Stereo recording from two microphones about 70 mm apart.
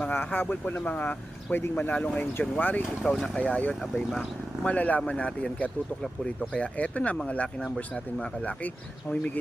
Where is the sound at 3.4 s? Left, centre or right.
Centre.